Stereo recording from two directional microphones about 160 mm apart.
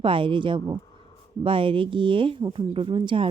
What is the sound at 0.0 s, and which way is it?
A woman's voice, 35° right (ahead or behind).